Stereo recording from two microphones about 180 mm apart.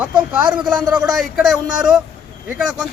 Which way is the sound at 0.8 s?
20° right (ahead or behind).